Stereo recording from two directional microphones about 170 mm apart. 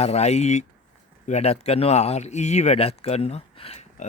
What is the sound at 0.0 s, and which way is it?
Speech, 40° left (ahead or behind).